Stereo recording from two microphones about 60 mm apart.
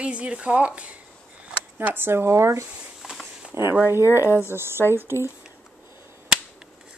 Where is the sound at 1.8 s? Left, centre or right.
Right.